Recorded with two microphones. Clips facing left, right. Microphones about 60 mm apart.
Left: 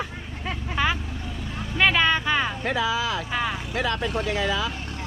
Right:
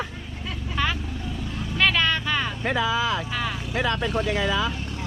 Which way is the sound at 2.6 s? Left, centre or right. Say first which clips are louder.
Right 1 dB; right.